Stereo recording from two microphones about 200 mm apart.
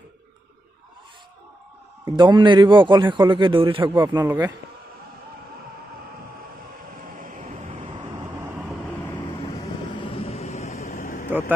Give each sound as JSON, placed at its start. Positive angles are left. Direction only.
{"t": 2.0, "sound": "a man's voice", "side_deg": -25}
{"t": 7.2, "sound": "train", "side_deg": -40}
{"t": 9.9, "sound": "vehicle", "side_deg": 25}
{"t": 11.2, "sound": "vehicle", "side_deg": -10}